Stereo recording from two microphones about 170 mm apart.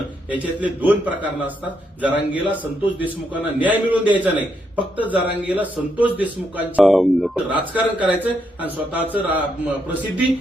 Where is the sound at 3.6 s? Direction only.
10° right (ahead or behind).